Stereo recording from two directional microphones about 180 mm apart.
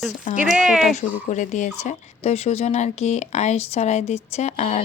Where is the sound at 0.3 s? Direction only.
5° right (ahead or behind).